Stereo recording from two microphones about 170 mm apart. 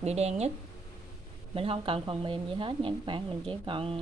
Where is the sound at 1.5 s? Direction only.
35° right (ahead or behind).